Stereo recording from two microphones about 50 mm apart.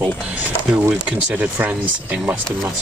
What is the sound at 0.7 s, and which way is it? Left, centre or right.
Speech, centre.